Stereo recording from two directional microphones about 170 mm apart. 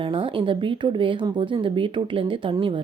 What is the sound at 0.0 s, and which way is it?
Speech, 30° right (ahead or behind).